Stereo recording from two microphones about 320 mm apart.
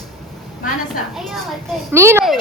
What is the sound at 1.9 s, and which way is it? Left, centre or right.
Speech, centre.